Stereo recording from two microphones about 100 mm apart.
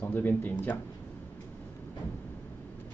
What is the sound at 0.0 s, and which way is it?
Speech, 20° left (ahead or behind).